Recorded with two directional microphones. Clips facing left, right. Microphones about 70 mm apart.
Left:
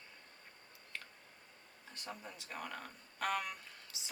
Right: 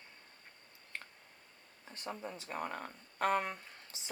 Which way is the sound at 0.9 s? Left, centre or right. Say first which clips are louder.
Right 2 dB; right.